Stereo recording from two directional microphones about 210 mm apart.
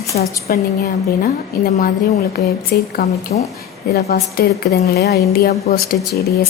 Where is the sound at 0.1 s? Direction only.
40° left (ahead or behind).